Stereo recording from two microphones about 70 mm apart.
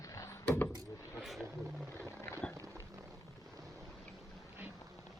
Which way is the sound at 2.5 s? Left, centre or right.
Right.